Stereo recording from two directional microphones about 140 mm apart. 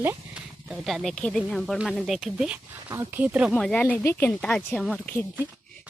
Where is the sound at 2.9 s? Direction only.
15° right (ahead or behind).